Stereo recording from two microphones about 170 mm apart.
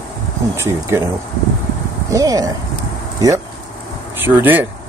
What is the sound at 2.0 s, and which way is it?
Speech, 20° right (ahead or behind).